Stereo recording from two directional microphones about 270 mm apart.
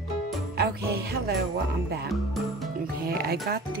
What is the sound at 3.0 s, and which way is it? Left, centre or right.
Speech, right.